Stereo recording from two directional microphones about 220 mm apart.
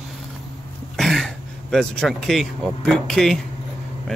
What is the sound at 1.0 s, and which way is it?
Speech, centre (ahead or behind).